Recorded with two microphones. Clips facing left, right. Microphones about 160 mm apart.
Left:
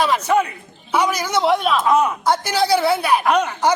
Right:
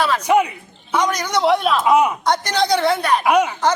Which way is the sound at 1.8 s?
15° right (ahead or behind).